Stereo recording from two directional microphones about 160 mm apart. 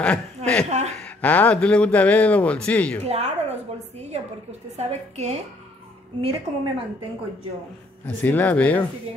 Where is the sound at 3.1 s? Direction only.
40° right (ahead or behind).